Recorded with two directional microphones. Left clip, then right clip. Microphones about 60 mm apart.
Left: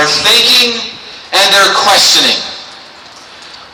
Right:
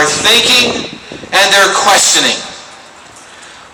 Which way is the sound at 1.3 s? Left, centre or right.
Right.